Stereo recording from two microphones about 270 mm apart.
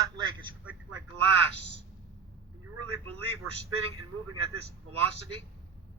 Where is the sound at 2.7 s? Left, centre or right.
Right.